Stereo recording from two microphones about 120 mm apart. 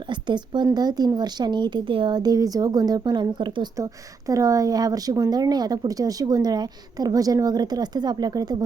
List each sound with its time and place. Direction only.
0.1 s speech: 40° right (ahead or behind)
4.3 s speech: 30° right (ahead or behind)